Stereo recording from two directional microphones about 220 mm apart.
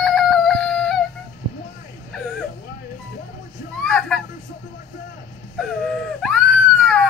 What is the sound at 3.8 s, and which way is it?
Speech, centre (ahead or behind).